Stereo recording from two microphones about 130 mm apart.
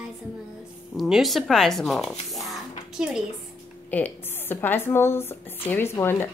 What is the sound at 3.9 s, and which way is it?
Speech, 15° left (ahead or behind).